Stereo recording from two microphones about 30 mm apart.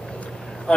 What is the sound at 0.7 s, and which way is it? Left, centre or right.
Speech, left.